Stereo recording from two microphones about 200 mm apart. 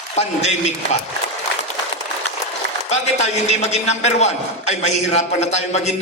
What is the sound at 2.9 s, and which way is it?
A man's voice, 35° left (ahead or behind).